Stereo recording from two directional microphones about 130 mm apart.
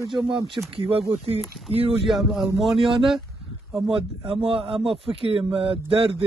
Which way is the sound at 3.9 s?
45° right (ahead or behind).